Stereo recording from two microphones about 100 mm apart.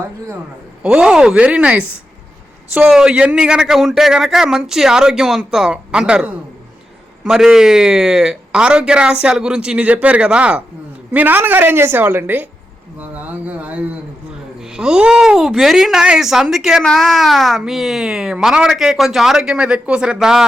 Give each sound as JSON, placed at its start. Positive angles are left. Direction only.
{"t": 0.8, "sound": "speech", "side_deg": -10}
{"t": 2.9, "sound": "a woman's voice", "side_deg": -10}